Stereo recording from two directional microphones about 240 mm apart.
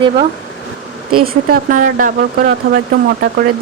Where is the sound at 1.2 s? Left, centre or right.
Right.